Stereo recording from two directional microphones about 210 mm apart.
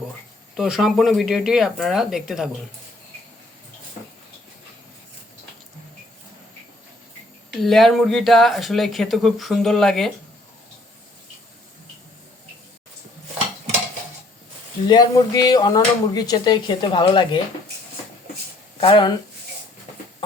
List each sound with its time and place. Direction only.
0.5 s speech: centre (ahead or behind)
7.5 s speech: centre (ahead or behind)
14.8 s speech: 20° left (ahead or behind)
18.8 s speech: 25° left (ahead or behind)